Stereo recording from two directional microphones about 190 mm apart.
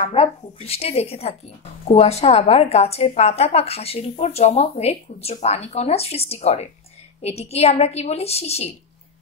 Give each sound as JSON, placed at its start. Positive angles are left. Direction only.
{"t": 0.1, "sound": "a woman's voice", "side_deg": 30}